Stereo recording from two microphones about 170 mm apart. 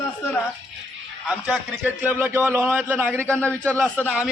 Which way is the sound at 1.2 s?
5° right (ahead or behind).